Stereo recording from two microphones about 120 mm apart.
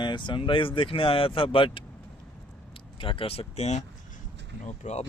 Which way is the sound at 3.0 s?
50° left (ahead or behind).